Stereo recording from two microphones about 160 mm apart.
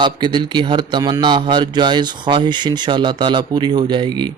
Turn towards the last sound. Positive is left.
turn(degrees=-30)  # may be behind; listen again after turning